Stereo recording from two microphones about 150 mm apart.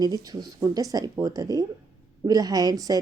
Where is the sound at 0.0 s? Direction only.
25° right (ahead or behind).